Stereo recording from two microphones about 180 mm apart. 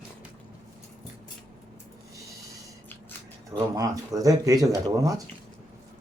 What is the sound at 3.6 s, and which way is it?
Speech, 20° right (ahead or behind).